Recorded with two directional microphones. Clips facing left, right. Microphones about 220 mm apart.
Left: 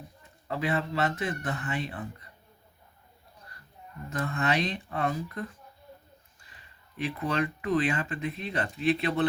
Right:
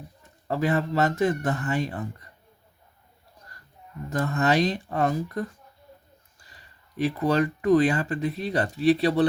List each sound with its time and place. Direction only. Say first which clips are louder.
0.4 s speech: right 5 dB; 40° right (ahead or behind)
4.1 s speech: right 6 dB; 40° right (ahead or behind)